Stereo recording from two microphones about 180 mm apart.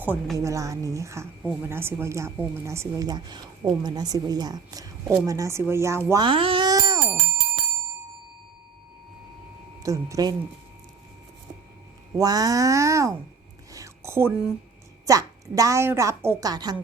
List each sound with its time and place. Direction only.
0.3 s speech: 15° right (ahead or behind)
9.8 s a woman's voice: 20° right (ahead or behind)
12.1 s a woman's voice: 20° right (ahead or behind)
13.7 s a sound: 20° right (ahead or behind)
15.0 s a woman's voice: 20° right (ahead or behind)